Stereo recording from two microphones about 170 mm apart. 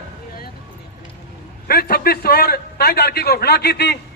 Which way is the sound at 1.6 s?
65° left (ahead or behind).